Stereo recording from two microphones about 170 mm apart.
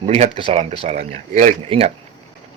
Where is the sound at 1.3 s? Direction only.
50° right (ahead or behind).